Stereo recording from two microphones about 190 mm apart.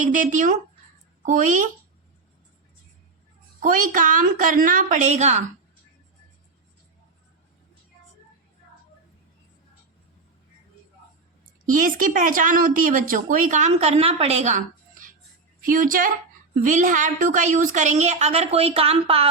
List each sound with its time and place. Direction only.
0.0 s a child's voice: 40° right (ahead or behind)
3.6 s speech: 45° right (ahead or behind)
11.6 s a woman's voice: 45° right (ahead or behind)